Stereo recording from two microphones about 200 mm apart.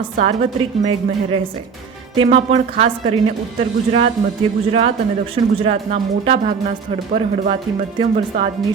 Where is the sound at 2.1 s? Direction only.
30° right (ahead or behind).